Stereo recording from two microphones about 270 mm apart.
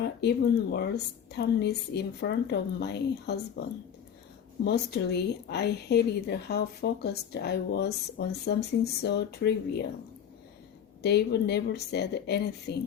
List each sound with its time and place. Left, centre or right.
0.0 s speech: left
4.6 s speech: left
11.0 s speech: left